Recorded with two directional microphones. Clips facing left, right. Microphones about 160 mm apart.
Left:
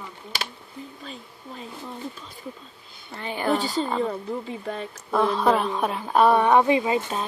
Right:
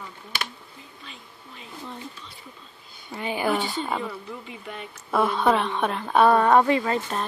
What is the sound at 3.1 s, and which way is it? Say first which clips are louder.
Speech: even; 15° right (ahead or behind).